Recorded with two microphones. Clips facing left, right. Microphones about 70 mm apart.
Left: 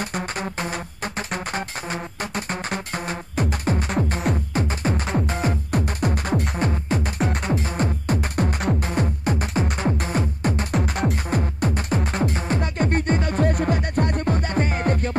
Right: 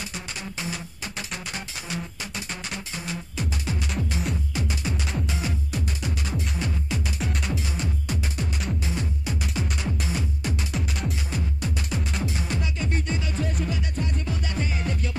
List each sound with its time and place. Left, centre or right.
0.0 s music: left